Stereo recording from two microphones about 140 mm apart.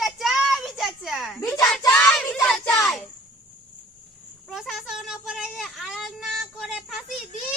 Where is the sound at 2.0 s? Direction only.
5° left (ahead or behind).